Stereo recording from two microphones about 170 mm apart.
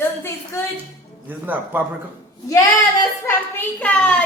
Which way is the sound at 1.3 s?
10° right (ahead or behind).